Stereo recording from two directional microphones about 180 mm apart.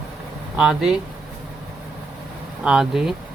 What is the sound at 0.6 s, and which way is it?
Speech, 5° right (ahead or behind).